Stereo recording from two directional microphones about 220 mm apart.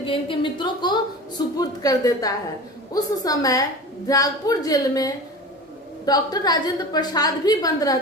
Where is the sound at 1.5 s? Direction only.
15° left (ahead or behind).